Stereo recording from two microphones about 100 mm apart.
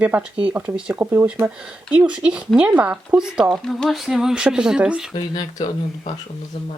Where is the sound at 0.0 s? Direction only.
15° right (ahead or behind).